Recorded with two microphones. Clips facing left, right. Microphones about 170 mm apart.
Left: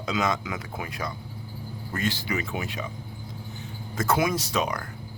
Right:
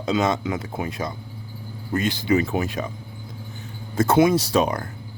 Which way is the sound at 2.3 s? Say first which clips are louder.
Right 9 dB; 35° right (ahead or behind).